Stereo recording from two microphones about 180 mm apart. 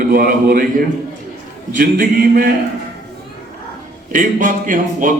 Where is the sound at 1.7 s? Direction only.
55° right (ahead or behind).